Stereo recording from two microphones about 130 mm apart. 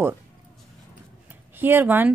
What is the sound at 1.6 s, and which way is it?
Speech, 15° right (ahead or behind).